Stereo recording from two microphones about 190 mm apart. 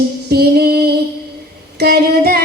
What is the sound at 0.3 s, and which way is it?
Female singing, 55° right (ahead or behind).